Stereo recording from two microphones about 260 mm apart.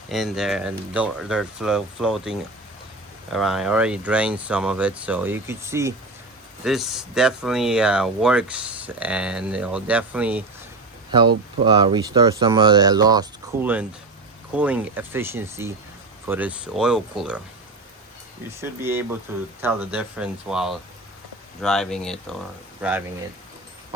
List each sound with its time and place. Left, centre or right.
0.1 s speech: centre
11.1 s speech: centre
18.6 s speech: centre